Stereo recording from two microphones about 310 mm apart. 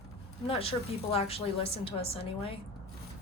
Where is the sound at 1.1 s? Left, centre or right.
Centre.